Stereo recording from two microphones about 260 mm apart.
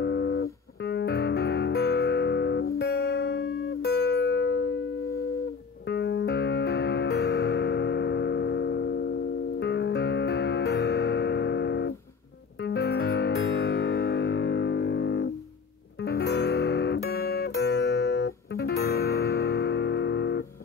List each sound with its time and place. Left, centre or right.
0.0 s music: left